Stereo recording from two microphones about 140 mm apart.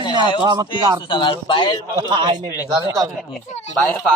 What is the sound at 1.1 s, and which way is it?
Speech, 35° left (ahead or behind).